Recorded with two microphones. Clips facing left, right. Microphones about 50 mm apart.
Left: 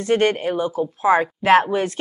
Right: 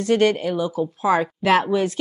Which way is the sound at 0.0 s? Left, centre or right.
Left.